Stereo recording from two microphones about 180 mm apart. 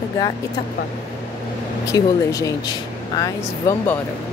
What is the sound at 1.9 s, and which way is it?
Speech, 20° left (ahead or behind).